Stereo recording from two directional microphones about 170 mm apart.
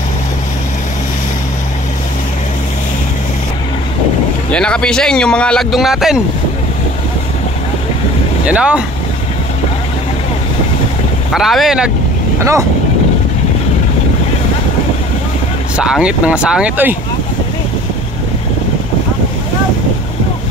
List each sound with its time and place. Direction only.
4.5 s a man's voice: 5° left (ahead or behind)
8.5 s speech: 5° right (ahead or behind)
11.3 s a man's voice: centre (ahead or behind)
12.4 s speech: 15° right (ahead or behind)
15.7 s a man's voice: 5° right (ahead or behind)